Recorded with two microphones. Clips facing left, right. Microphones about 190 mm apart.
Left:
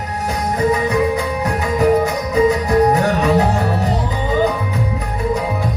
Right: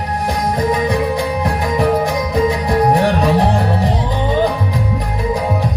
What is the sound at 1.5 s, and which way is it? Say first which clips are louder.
Music: left 3 dB; 35° right (ahead or behind).